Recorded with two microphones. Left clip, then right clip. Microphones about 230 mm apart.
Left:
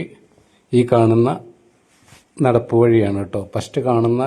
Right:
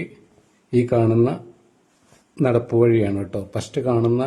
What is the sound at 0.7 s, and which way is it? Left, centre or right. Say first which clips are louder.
Speech: left 4 dB; centre.